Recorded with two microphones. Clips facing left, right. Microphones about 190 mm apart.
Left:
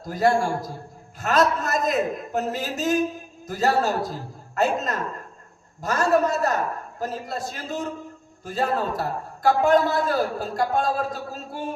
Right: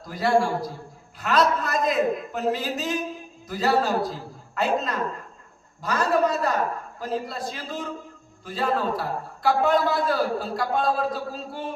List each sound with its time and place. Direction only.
0.0 s a man's voice: 45° left (ahead or behind)